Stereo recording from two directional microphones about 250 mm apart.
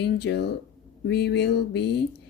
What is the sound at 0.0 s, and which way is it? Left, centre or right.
Speech, left.